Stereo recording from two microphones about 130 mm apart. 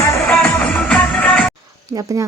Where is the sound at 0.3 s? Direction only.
10° left (ahead or behind).